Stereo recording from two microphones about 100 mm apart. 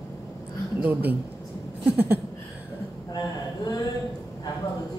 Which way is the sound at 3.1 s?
45° left (ahead or behind).